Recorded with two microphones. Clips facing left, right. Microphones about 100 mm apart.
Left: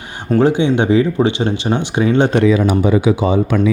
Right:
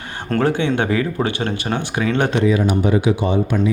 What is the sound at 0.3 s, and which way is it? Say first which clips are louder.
Speech: left 5 dB; 15° left (ahead or behind).